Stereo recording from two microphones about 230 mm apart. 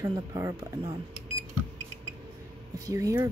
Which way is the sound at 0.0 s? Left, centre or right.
Centre.